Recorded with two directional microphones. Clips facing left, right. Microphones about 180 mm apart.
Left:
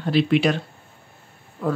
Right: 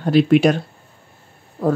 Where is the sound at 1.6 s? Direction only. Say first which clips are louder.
Right 5 dB; 35° right (ahead or behind).